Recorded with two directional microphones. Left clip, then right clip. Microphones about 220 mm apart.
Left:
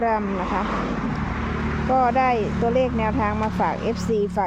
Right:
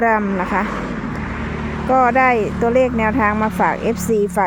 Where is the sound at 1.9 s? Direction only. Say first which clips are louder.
Right 6 dB; 20° right (ahead or behind).